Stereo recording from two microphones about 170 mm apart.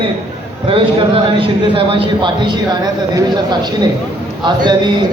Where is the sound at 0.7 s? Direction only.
30° right (ahead or behind).